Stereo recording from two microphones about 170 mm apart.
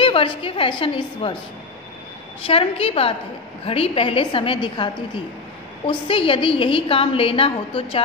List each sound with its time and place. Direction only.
0.0 s a woman's voice: 30° left (ahead or behind)
2.4 s a woman's voice: 35° left (ahead or behind)